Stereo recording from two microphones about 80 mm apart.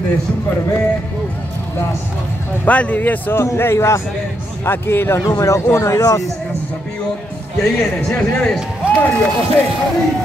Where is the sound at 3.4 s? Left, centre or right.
Left.